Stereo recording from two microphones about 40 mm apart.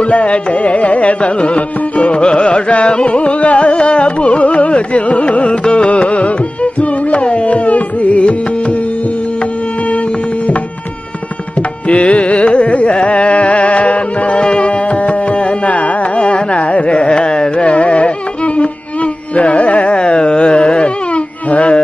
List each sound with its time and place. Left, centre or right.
0.0 s carnatic music: left
9.8 s music: left
11.9 s carnatic music: left